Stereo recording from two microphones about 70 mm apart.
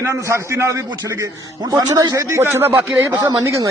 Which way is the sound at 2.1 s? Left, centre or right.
Right.